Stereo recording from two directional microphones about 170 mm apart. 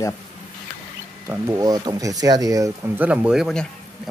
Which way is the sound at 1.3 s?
15° right (ahead or behind).